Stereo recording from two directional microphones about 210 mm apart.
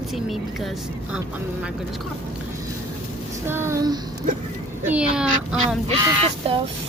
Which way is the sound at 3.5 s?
10° right (ahead or behind).